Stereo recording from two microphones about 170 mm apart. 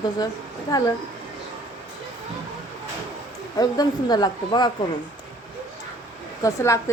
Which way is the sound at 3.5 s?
25° left (ahead or behind).